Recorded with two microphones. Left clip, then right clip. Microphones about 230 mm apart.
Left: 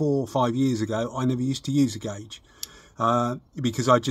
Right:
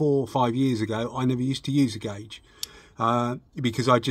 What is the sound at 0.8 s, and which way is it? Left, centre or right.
Speech, centre.